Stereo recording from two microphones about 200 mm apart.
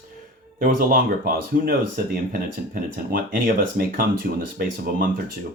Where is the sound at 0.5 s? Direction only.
45° right (ahead or behind).